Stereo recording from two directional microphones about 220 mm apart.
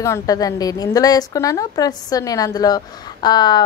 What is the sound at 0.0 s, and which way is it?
A woman's voice, 15° left (ahead or behind).